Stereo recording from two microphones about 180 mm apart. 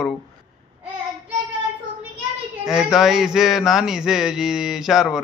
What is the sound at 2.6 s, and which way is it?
Speech, centre (ahead or behind).